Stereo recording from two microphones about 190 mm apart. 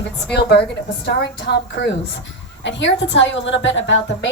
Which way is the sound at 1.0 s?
60° left (ahead or behind).